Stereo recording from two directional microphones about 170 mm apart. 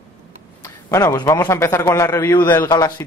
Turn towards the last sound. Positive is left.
turn(degrees=20)  # may be behind; listen again after turning